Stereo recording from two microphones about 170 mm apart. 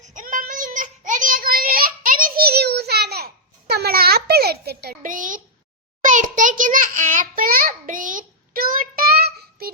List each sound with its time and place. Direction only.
0.0 s child singing: 50° right (ahead or behind); by 9.7 s 65° right (ahead or behind)